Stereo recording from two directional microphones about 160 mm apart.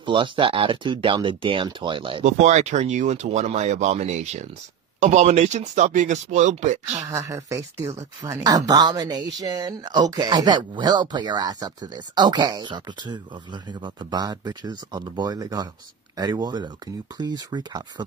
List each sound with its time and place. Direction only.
0.0 s speech: 30° right (ahead or behind)
2.2 s speech: 45° right (ahead or behind)
7.1 s speech: 20° right (ahead or behind)